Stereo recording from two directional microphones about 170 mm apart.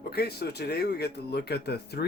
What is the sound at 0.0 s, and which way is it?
Speech, 70° left (ahead or behind).